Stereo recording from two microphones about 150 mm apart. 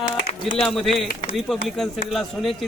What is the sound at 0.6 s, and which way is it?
A man's voice, centre (ahead or behind).